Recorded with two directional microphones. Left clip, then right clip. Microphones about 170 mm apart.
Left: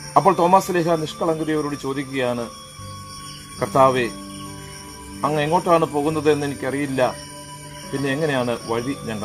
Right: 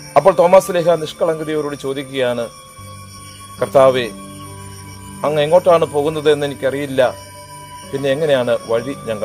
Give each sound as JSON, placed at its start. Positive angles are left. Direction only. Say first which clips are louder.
{"t": 0.1, "sound": "speech", "louder": "right 5 dB", "side_deg": -80}
{"t": 3.5, "sound": "speech", "louder": "right 5 dB", "side_deg": -70}
{"t": 5.2, "sound": "speech", "louder": "right 7 dB", "side_deg": -70}